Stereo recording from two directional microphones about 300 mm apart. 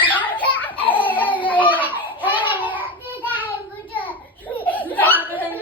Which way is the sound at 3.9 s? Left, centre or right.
Centre.